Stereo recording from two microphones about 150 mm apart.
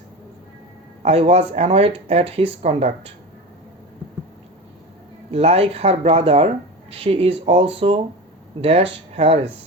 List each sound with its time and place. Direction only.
1.0 s speech: 45° right (ahead or behind)
5.3 s speech: 45° right (ahead or behind)